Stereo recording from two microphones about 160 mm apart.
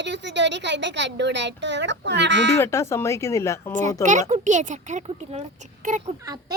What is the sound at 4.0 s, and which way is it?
A child's voice, 50° right (ahead or behind).